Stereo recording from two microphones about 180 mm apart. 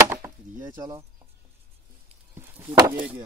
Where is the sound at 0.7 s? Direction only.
20° right (ahead or behind).